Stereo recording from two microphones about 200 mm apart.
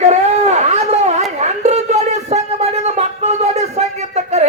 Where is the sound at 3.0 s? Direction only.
35° right (ahead or behind).